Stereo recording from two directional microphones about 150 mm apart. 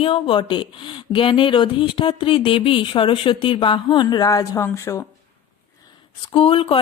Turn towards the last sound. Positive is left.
turn(degrees=35)  # may be behind; listen again after turning